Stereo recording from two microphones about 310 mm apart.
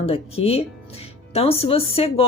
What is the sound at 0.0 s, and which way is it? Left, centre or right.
Speech, centre.